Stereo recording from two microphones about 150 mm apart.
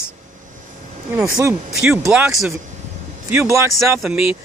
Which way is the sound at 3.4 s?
20° right (ahead or behind).